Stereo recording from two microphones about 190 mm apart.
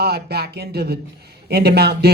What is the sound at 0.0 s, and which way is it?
A man's voice, 55° right (ahead or behind).